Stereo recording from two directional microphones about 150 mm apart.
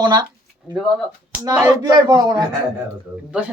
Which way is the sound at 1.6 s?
25° right (ahead or behind).